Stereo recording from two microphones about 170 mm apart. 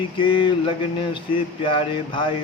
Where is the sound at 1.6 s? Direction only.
30° left (ahead or behind).